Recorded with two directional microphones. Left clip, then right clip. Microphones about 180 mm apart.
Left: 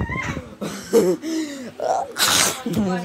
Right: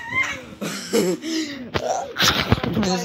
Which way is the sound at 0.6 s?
15° left (ahead or behind).